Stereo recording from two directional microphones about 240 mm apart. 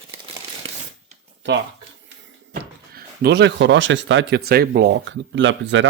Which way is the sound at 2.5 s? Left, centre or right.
Right.